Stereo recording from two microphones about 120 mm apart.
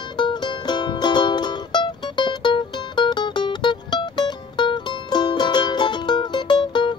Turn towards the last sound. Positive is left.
turn(degrees=40)  # may be behind; listen again after turning